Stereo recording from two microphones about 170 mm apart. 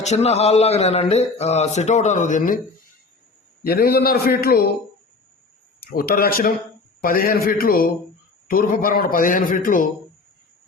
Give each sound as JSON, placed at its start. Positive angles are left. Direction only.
{"t": 0.0, "sound": "speech", "side_deg": 40}
{"t": 3.6, "sound": "a man's voice", "side_deg": 65}
{"t": 5.8, "sound": "a man's voice", "side_deg": 60}